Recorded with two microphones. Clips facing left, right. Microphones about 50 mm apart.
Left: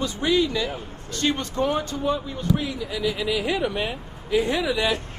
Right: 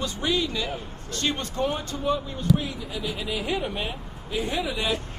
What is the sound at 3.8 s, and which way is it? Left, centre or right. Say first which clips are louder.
Speech: left 4 dB; left.